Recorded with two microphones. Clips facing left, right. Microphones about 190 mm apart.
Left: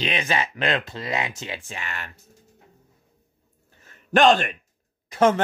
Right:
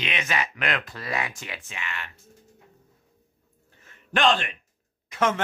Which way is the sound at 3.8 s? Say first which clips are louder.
Left 6 dB; 40° left (ahead or behind).